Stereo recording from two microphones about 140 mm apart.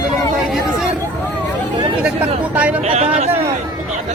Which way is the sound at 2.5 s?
10° right (ahead or behind).